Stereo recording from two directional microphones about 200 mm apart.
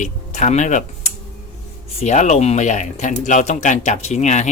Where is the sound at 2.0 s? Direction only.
35° left (ahead or behind).